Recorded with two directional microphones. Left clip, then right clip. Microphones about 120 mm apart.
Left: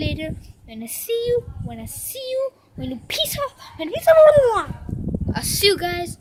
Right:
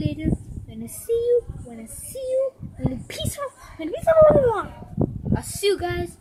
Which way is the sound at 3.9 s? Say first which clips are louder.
Left 3 dB; 5° left (ahead or behind).